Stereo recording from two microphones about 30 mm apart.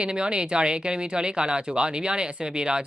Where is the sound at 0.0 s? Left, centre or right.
Right.